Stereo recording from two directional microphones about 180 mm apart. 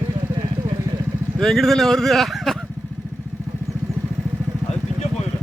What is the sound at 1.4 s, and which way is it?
Speech, centre (ahead or behind).